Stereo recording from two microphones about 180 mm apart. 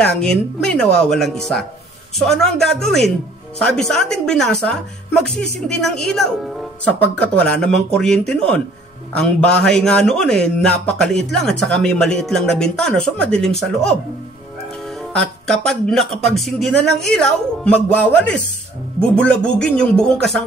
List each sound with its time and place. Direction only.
0.0 s a man's voice: 5° left (ahead or behind)
15.0 s a man's voice: 5° left (ahead or behind)